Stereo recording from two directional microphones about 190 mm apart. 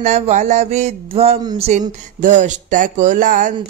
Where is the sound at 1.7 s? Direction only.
40° right (ahead or behind).